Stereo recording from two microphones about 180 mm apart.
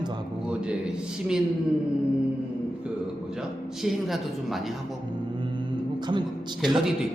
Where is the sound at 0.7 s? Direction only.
5° right (ahead or behind).